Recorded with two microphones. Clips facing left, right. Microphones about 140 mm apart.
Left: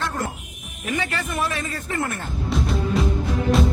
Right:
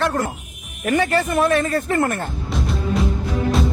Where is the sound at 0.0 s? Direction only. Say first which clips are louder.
Right 6 dB; 80° right.